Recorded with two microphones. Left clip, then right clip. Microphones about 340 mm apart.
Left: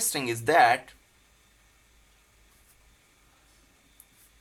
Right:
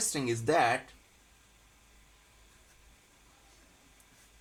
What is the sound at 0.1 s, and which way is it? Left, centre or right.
Speech, left.